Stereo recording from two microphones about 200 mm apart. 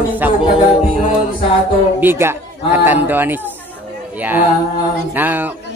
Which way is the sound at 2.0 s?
10° right (ahead or behind).